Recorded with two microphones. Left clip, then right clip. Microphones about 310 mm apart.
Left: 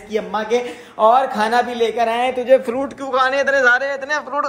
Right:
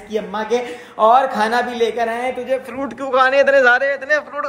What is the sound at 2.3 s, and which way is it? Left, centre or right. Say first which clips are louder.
Speech: left 7 dB; left.